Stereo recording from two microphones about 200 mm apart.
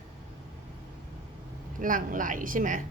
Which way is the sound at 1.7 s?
45° right (ahead or behind).